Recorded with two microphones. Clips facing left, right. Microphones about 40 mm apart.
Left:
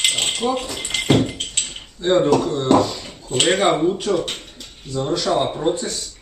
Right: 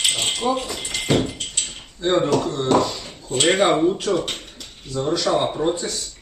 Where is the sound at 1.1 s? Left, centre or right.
Left.